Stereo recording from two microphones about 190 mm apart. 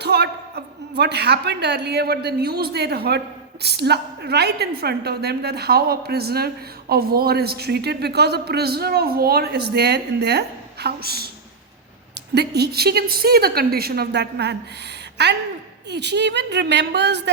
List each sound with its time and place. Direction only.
0.0 s a man's voice: 60° right (ahead or behind)
12.3 s a woman's voice: 60° right (ahead or behind)